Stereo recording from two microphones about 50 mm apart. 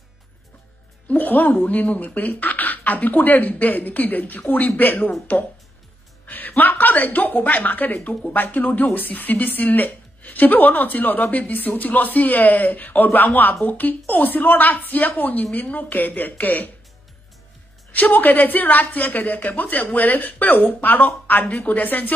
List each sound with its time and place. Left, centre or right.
1.0 s speech: left
6.2 s a woman's voice: left
17.9 s speech: left